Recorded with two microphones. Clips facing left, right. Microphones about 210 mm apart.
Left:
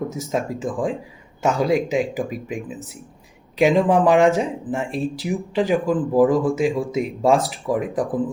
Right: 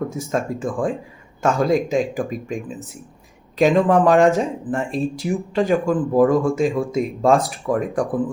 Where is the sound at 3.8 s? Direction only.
15° left (ahead or behind).